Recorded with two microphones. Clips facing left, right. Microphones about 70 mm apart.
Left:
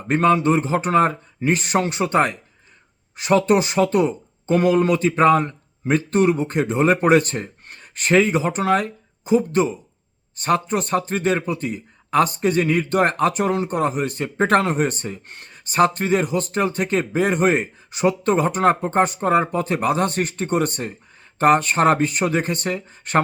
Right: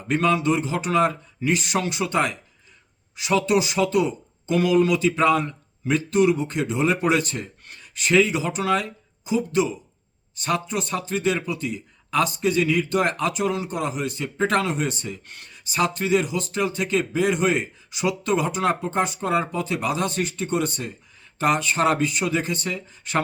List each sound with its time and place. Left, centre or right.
0.1 s speech: left